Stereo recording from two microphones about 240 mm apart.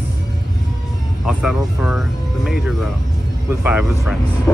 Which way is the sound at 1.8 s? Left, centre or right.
Centre.